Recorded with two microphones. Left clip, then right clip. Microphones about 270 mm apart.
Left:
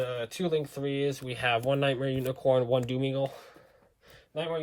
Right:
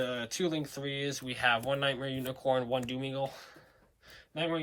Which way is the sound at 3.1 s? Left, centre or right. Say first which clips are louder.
Left 4 dB; left.